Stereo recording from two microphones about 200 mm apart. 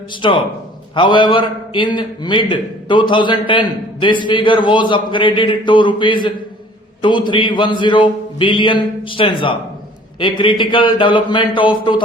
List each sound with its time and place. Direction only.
0.2 s a man's voice: 25° left (ahead or behind)